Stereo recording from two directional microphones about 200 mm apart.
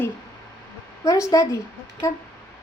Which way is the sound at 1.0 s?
15° left (ahead or behind).